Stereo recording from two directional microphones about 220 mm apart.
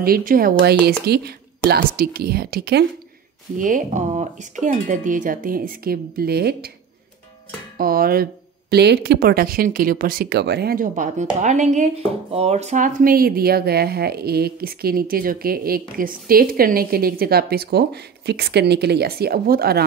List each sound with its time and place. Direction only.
0.0 s speech: 40° right (ahead or behind)
7.7 s speech: 40° right (ahead or behind)